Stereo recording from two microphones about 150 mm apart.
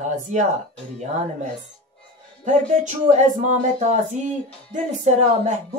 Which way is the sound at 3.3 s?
55° right (ahead or behind).